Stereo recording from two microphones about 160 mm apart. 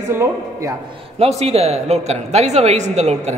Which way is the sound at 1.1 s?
40° right (ahead or behind).